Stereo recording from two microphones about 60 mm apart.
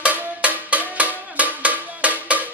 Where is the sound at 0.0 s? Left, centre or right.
Right.